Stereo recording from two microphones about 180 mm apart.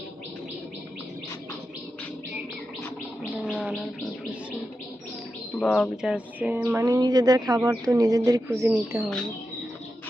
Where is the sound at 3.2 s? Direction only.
5° right (ahead or behind).